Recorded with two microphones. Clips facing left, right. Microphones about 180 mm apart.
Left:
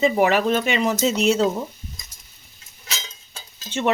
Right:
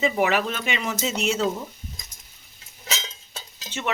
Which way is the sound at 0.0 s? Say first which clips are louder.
Left 4 dB; 40° left (ahead or behind).